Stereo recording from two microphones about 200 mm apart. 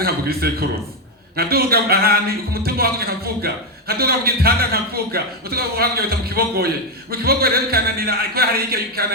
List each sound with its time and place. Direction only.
0.0 s a man's voice: 50° right (ahead or behind)